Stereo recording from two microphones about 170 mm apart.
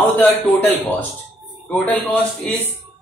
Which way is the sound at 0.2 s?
10° left (ahead or behind).